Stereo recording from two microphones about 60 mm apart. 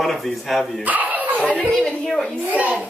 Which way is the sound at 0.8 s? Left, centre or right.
Right.